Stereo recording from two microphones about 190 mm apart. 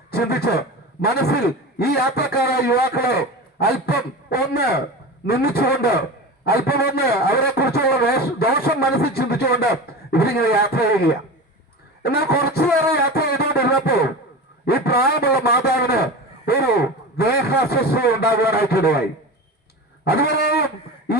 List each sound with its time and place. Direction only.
0.1 s a man's voice: 55° left (ahead or behind)
20.1 s a man's voice: 55° left (ahead or behind)